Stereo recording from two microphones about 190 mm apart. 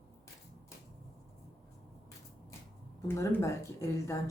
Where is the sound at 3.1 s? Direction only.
15° left (ahead or behind).